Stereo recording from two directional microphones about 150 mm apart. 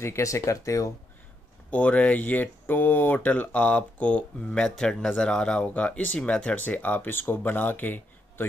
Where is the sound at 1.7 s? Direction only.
10° left (ahead or behind).